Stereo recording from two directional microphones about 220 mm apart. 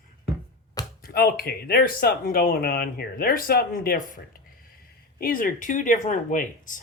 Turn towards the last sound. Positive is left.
turn(degrees=35)  # may be behind; listen again after turning